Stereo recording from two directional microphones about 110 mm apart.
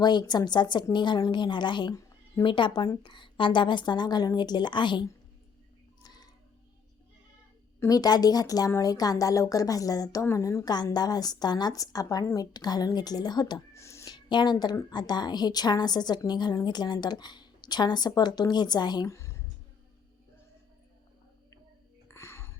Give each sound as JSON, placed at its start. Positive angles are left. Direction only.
{"t": 0.0, "sound": "a woman's voice", "side_deg": 40}
{"t": 6.0, "sound": "music", "side_deg": 40}
{"t": 7.9, "sound": "a woman's voice", "side_deg": 35}
{"t": 10.7, "sound": "a woman's voice", "side_deg": 40}
{"t": 13.7, "sound": "a sound", "side_deg": 25}
{"t": 14.1, "sound": "a woman's voice", "side_deg": 40}
{"t": 19.0, "sound": "a sound", "side_deg": 25}
{"t": 22.1, "sound": "music", "side_deg": 25}